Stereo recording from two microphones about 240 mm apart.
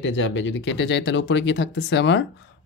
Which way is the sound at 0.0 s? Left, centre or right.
Left.